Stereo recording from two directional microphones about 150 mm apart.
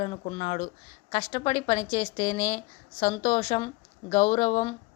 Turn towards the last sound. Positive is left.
turn(degrees=50)  # may be behind; listen again after turning